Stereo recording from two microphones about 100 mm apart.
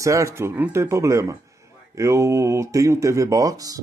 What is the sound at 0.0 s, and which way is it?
A man's voice, 30° right (ahead or behind).